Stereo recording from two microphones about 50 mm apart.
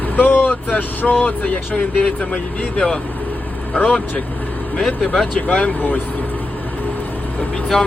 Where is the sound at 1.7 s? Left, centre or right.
Left.